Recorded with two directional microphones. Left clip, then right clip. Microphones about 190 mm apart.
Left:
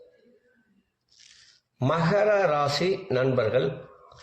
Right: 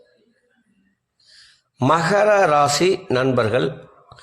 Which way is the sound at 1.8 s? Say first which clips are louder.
Right 7 dB; 60° right (ahead or behind).